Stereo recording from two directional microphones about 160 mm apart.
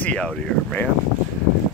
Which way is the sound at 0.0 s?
5° left (ahead or behind).